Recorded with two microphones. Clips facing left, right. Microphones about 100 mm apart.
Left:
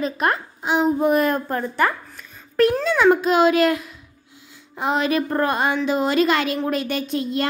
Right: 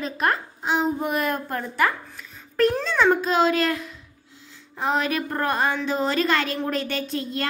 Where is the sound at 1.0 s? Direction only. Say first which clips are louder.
Left 7 dB; 40° left (ahead or behind).